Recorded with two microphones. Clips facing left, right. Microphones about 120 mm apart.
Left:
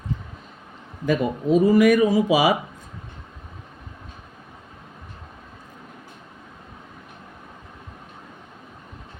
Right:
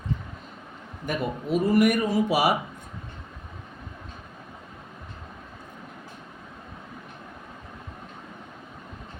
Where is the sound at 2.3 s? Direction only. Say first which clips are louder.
Left 4 dB; 90° left.